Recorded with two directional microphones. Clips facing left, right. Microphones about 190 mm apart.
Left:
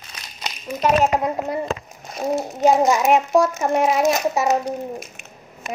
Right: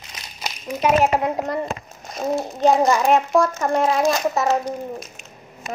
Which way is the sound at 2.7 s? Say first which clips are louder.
Even; 20° left (ahead or behind).